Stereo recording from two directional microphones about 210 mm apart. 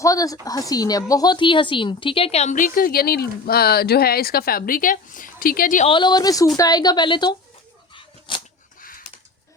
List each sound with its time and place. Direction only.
0.0 s a woman's voice: 15° left (ahead or behind); by 5.9 s 40° left (ahead or behind)
5.9 s a woman's voice: 20° left (ahead or behind)
8.3 s a sound: 25° left (ahead or behind)
8.8 s bird: 40° left (ahead or behind)